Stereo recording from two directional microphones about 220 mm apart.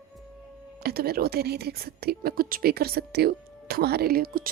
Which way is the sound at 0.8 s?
45° right (ahead or behind).